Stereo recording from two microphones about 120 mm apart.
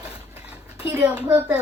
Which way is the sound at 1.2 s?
15° right (ahead or behind).